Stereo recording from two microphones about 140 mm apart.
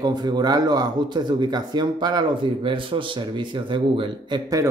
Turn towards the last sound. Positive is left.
turn(degrees=-35)  # may be behind; listen again after turning